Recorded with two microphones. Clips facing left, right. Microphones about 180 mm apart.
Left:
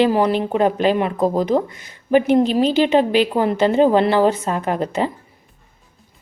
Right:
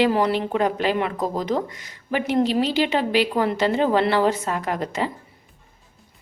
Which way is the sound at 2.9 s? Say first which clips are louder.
Left 5 dB; 20° left (ahead or behind).